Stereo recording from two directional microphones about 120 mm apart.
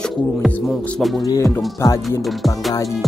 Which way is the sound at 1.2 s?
30° left (ahead or behind).